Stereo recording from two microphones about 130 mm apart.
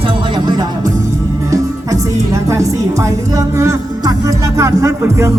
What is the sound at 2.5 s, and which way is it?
Music, 25° right (ahead or behind).